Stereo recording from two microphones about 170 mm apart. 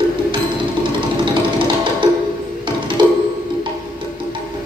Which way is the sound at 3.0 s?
30° right (ahead or behind).